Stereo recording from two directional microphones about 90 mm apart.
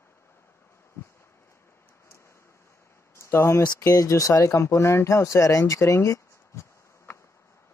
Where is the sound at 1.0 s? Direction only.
30° left (ahead or behind).